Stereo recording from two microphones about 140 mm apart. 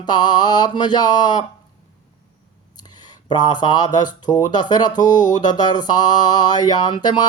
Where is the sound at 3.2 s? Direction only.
30° left (ahead or behind).